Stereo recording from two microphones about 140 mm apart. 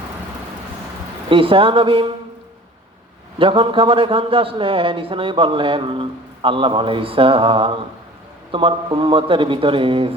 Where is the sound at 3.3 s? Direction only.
40° right (ahead or behind).